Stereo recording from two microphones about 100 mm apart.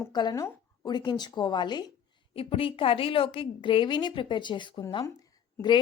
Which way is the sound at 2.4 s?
70° left (ahead or behind).